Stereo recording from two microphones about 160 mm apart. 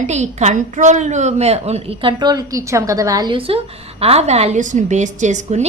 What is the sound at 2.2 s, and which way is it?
A woman's voice, 25° right (ahead or behind).